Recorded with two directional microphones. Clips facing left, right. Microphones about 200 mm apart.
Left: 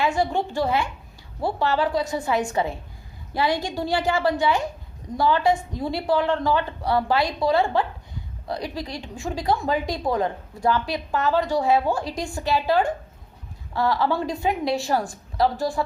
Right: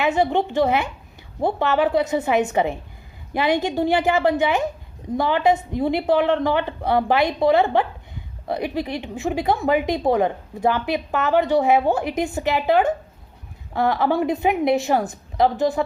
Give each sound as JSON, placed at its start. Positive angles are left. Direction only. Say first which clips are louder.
{"t": 0.0, "sound": "speech", "louder": "right 3 dB", "side_deg": -20}
{"t": 8.9, "sound": "speech", "louder": "right 6 dB", "side_deg": -20}